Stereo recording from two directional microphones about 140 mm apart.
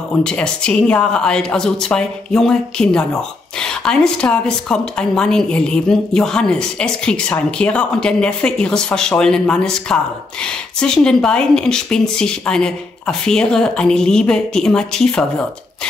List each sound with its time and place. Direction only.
0.2 s speech: 5° left (ahead or behind)